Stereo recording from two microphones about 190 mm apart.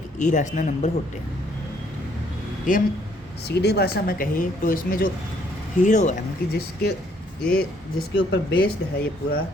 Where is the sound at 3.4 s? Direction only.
60° left (ahead or behind); by 6.1 s 40° left (ahead or behind).